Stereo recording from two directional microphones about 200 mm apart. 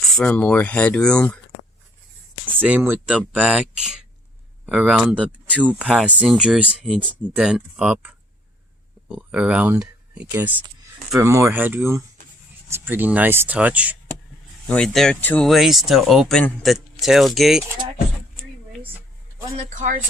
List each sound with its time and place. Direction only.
0.0 s speech: 5° left (ahead or behind)
2.6 s speech: 10° right (ahead or behind)
14.7 s speech: 5° left (ahead or behind)
19.5 s speech: 40° right (ahead or behind)